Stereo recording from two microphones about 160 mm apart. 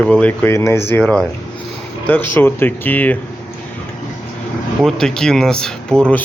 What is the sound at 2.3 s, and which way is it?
Speech, 15° left (ahead or behind).